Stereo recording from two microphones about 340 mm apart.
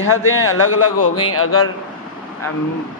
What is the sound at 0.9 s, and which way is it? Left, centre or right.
Speech, left.